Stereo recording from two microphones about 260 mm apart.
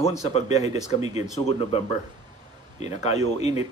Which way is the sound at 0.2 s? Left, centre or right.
Left.